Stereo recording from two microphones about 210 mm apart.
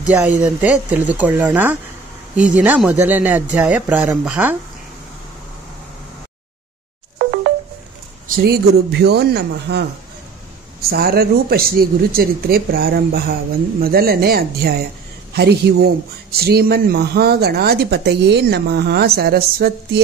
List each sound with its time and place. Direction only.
0.0 s speech: 5° right (ahead or behind)
7.2 s music: 45° right (ahead or behind)
8.4 s a man's voice: 50° right (ahead or behind)